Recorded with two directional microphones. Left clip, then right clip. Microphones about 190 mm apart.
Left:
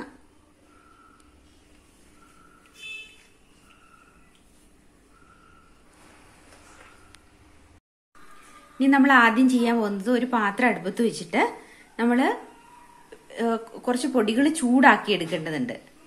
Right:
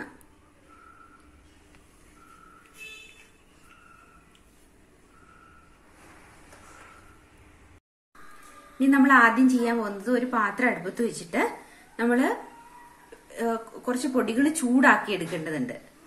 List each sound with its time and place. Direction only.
8.7 s a woman's voice: 55° left (ahead or behind)
13.3 s a woman's voice: 55° left (ahead or behind)